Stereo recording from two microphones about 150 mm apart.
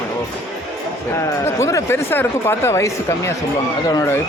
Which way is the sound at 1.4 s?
20° left (ahead or behind).